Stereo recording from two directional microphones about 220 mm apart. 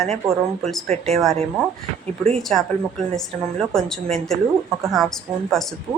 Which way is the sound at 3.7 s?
Centre (ahead or behind).